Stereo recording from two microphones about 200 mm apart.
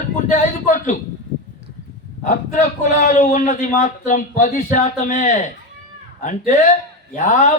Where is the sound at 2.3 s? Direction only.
40° left (ahead or behind).